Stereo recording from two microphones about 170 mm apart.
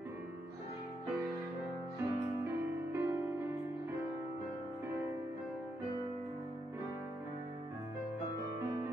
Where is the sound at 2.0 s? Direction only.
15° right (ahead or behind).